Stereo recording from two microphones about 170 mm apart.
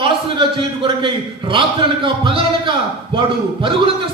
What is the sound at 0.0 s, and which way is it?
A man's voice, 30° right (ahead or behind).